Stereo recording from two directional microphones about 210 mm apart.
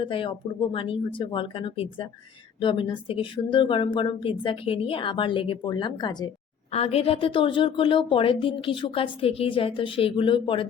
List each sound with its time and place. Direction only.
0.0 s a woman's voice: 25° left (ahead or behind)